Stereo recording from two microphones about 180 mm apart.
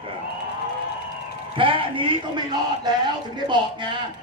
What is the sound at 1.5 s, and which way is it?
Speech, 30° right (ahead or behind).